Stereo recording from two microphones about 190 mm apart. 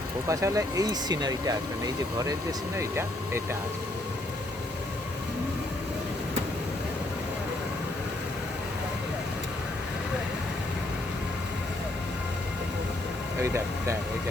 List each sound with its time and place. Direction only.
0.3 s speech: 15° right (ahead or behind)
2.7 s speech: 15° right (ahead or behind)
13.4 s speech: 15° right (ahead or behind)